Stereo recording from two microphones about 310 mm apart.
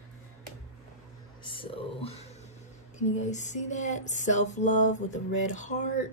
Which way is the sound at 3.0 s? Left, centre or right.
Left.